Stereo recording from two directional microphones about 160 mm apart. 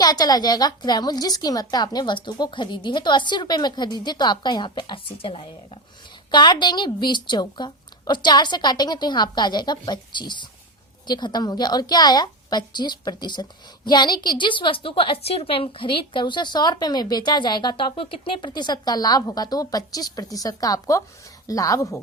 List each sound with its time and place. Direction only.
0.0 s a woman's voice: 25° left (ahead or behind)